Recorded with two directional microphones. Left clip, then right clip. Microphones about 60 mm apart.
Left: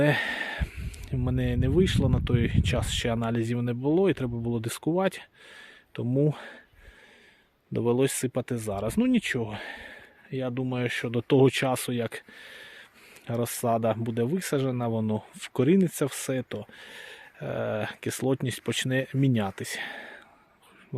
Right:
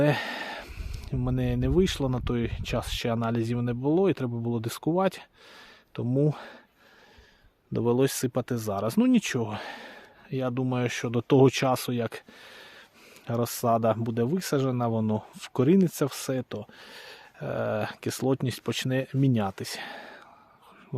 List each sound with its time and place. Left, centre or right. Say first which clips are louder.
0.0 s a sound: left 1 dB; centre
1.2 s speech: even; centre
2.4 s speech: left 2 dB; centre
6.1 s speech: even; centre
7.7 s speech: even; centre
7.9 s speech: right 1 dB; right
15.4 s speech: even; centre